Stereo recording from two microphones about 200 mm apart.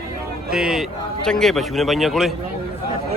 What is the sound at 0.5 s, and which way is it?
A man's voice, centre (ahead or behind).